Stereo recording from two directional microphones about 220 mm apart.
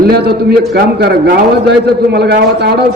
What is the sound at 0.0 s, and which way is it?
A man's voice, 45° right (ahead or behind).